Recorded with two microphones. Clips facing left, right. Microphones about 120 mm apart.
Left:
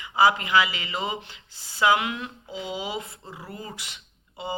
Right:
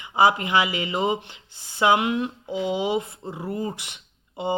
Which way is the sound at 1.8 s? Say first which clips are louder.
Right 2 dB; 35° right (ahead or behind).